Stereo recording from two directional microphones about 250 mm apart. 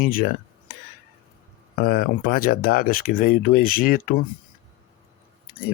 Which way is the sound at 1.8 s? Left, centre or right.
Left.